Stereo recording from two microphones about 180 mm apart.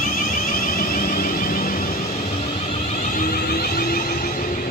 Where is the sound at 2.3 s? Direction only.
35° left (ahead or behind).